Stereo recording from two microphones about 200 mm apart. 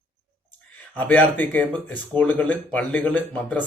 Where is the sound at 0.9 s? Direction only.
10° left (ahead or behind).